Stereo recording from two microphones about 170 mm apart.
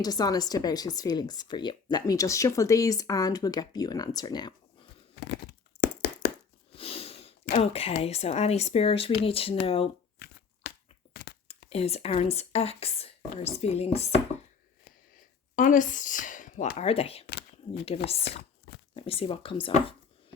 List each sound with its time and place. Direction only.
0.0 s speech: 25° left (ahead or behind)
5.8 s a sound: 75° left (ahead or behind)
6.7 s sniff: 35° left (ahead or behind)
7.5 s speech: 35° left (ahead or behind)
10.2 s a sound: 65° left (ahead or behind)
11.1 s tearing: 65° left (ahead or behind)
11.7 s speech: 35° left (ahead or behind)
15.5 s speech: 50° left (ahead or behind)
16.7 s speech: 35° left (ahead or behind)
17.2 s a sound: 80° left
17.8 s speech: 35° left (ahead or behind)